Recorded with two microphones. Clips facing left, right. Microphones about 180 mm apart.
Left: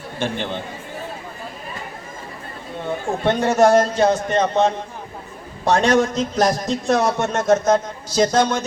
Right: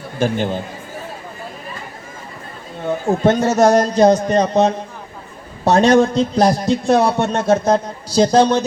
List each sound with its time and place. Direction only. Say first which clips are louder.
0.2 s a man's voice: right 6 dB; 40° right (ahead or behind)
3.2 s a man's voice: right 2 dB; 40° right (ahead or behind)